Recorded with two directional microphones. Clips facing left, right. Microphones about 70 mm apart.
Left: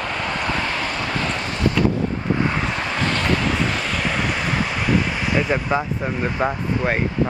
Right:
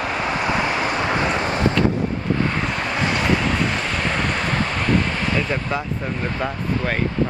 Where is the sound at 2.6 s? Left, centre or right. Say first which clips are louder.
Even; centre.